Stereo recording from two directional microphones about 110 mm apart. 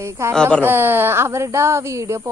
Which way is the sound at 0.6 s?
20° right (ahead or behind).